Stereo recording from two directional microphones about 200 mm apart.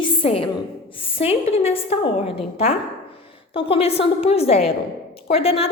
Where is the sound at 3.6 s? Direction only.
30° left (ahead or behind).